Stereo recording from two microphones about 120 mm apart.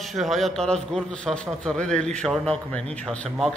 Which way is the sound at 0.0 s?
Centre (ahead or behind).